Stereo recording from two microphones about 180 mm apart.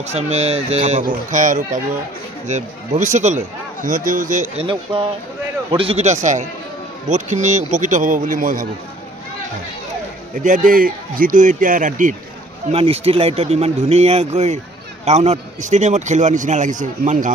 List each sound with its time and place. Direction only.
0.1 s a man's voice: 35° right (ahead or behind)
4.6 s a man's voice: 30° right (ahead or behind); by 8.6 s 50° right (ahead or behind)
10.3 s a man's voice: 45° right (ahead or behind)
12.7 s a man's voice: 30° right (ahead or behind)